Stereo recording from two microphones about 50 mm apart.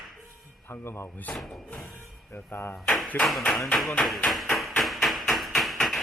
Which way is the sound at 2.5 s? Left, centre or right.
Left.